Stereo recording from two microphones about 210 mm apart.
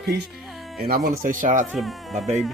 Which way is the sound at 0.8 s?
45° right (ahead or behind).